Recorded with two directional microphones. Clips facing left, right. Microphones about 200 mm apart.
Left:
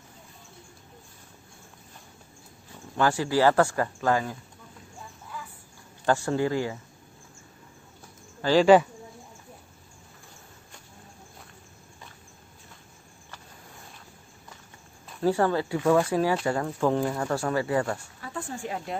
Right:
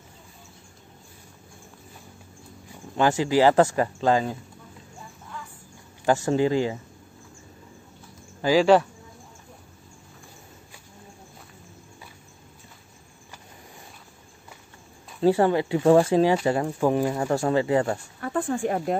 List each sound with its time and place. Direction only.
2.7 s speech: 20° right (ahead or behind)
6.2 s speech: 20° right (ahead or behind)
8.4 s speech: 10° right (ahead or behind)
15.1 s speech: 20° right (ahead or behind)
18.2 s speech: 55° right (ahead or behind)